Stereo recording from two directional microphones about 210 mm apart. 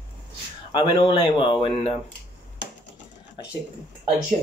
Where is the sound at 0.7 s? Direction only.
25° left (ahead or behind).